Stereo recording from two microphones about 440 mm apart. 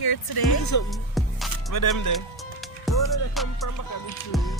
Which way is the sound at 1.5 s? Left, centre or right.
Left.